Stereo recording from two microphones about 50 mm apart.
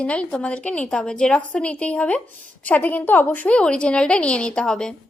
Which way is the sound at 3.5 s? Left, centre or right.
Left.